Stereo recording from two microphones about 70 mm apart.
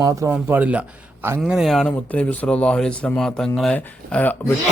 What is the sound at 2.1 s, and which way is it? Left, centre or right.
A man's voice, centre.